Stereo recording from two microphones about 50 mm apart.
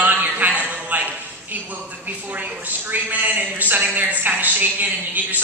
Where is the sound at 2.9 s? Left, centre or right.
Right.